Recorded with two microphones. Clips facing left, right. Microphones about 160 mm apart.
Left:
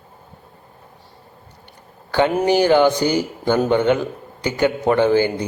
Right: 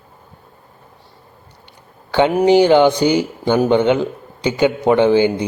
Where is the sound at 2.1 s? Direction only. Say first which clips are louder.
Right 4 dB; 15° right (ahead or behind).